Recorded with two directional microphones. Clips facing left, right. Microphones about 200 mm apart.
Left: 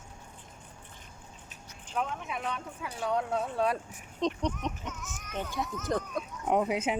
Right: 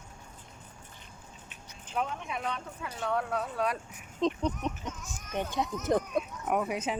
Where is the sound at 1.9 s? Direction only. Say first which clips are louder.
Even; centre (ahead or behind); by 3.8 s 25° left (ahead or behind).